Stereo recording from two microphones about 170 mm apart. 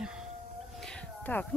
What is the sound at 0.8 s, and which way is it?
Cat, 5° left (ahead or behind).